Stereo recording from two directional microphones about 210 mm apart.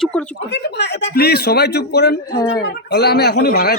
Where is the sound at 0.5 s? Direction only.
55° left (ahead or behind).